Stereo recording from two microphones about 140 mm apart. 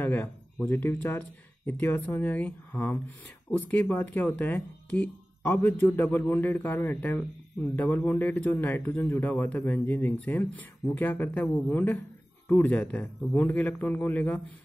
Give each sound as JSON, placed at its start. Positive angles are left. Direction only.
{"t": 0.0, "sound": "a man's voice", "side_deg": 15}